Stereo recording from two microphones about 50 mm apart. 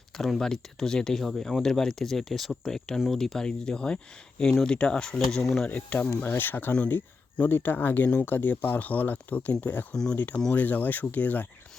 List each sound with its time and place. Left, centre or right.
0.2 s speech: centre
5.6 s speech: left
9.9 s speech: centre
10.5 s speech: left